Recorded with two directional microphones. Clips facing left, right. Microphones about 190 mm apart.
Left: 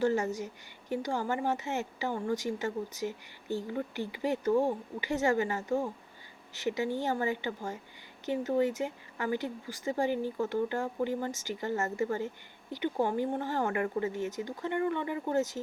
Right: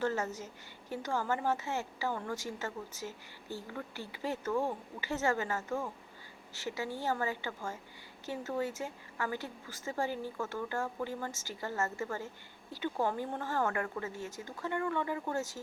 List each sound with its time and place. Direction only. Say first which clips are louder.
0.0 s a woman's voice: left 5 dB; 15° left (ahead or behind)